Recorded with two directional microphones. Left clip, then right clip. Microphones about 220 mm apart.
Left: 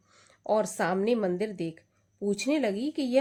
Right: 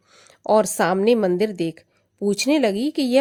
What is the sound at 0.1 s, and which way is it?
Speech, 40° right (ahead or behind).